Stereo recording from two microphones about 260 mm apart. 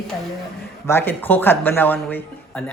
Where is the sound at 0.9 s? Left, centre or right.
Centre.